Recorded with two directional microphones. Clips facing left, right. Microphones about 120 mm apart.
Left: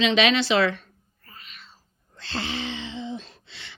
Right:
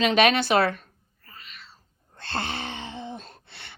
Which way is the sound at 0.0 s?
50° right (ahead or behind).